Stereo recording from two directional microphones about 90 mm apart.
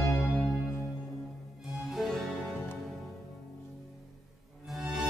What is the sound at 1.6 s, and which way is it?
Music, 5° right (ahead or behind).